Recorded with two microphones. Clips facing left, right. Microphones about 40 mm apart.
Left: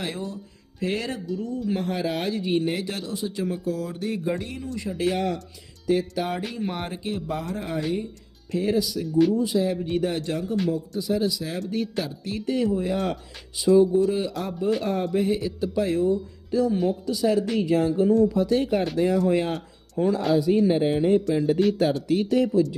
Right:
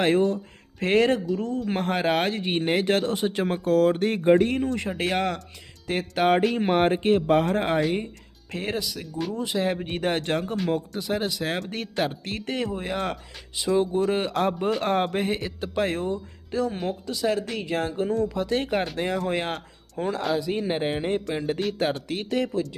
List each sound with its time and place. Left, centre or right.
0.0 s speech: right